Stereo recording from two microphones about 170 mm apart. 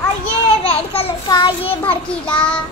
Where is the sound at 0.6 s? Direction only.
35° left (ahead or behind).